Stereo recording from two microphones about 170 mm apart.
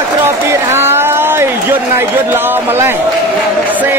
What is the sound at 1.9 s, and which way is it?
A man's voice, 10° right (ahead or behind).